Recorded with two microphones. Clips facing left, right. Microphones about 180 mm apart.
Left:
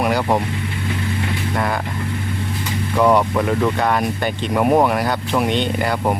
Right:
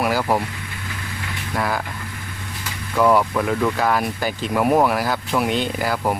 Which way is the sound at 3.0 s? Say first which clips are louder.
Left 1 dB; centre (ahead or behind).